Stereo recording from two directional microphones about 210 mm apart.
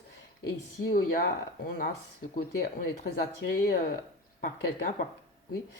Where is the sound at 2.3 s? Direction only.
45° left (ahead or behind).